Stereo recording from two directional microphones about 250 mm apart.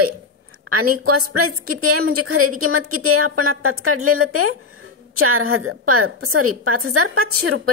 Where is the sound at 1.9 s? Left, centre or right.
Right.